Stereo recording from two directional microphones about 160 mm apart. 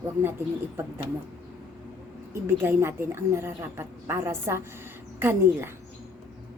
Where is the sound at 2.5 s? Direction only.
15° right (ahead or behind).